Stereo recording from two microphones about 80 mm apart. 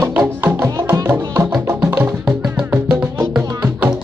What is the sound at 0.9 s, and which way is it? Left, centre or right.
Music, right.